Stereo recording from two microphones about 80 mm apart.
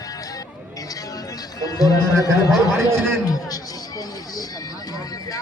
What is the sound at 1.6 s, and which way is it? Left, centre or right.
Speech, left.